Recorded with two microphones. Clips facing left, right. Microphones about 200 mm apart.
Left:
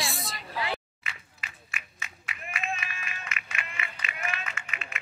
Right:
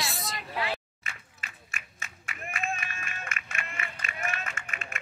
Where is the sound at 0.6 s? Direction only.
45° right (ahead or behind).